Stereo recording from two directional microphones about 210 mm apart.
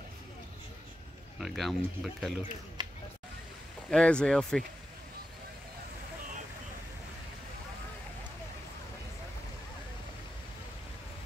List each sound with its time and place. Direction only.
1.4 s speech: centre (ahead or behind)
3.9 s speech: 5° left (ahead or behind)